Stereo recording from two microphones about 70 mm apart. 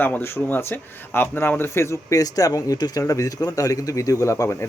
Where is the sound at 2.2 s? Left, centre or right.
Left.